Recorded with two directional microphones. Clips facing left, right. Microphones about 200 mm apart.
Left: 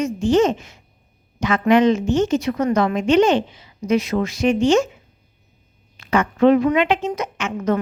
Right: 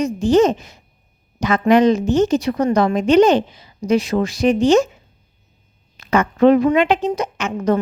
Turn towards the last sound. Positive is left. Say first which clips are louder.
# right 3 dB
turn(degrees=-35)  # may be behind; listen again after turning